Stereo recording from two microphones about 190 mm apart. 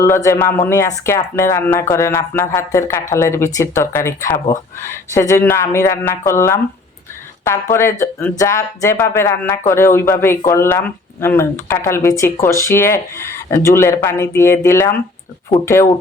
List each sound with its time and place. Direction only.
0.0 s speech: 15° left (ahead or behind)